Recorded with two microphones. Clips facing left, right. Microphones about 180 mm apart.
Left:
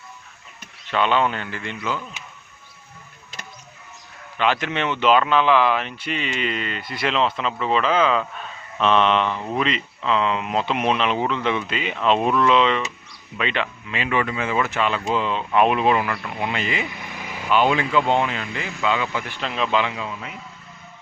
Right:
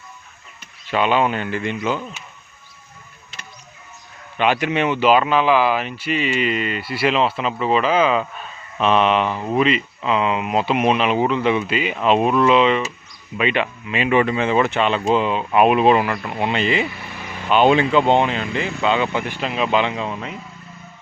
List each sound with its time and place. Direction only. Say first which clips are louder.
0.9 s speech: right 2 dB; 10° right (ahead or behind)
4.4 s speech: right 4 dB; 15° right (ahead or behind)
15.3 s speech: even; 10° right (ahead or behind)
15.8 s speech: right 5 dB; 25° right (ahead or behind)
16.9 s vehicle: right 1 dB; 15° left (ahead or behind)
17.5 s speech: right 4 dB; 25° right (ahead or behind)
19.4 s speech: right 1 dB; 10° right (ahead or behind)
19.9 s a man's voice: right 5 dB; 35° right (ahead or behind)